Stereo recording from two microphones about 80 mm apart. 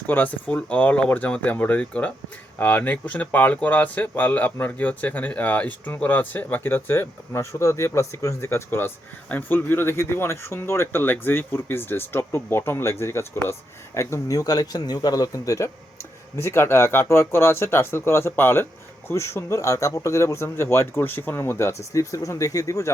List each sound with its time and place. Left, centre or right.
0.1 s speech: left